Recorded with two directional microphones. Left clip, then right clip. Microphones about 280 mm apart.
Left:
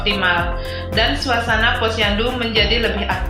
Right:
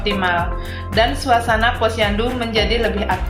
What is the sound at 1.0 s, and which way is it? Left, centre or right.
Speech, right.